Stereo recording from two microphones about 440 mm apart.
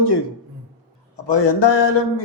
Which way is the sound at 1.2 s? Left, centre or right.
Left.